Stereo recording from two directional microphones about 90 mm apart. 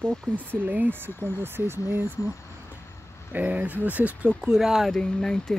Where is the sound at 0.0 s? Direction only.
20° right (ahead or behind).